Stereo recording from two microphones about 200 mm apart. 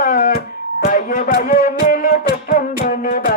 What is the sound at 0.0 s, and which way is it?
Music, 45° left (ahead or behind).